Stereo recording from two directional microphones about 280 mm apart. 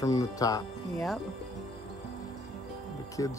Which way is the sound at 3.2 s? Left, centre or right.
Centre.